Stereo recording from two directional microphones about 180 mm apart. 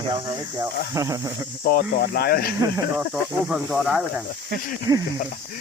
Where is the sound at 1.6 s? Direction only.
60° left (ahead or behind).